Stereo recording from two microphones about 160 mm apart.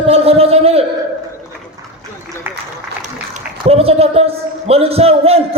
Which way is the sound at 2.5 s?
15° right (ahead or behind).